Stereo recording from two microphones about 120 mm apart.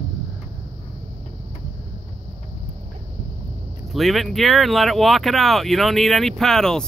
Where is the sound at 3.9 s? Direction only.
Centre (ahead or behind).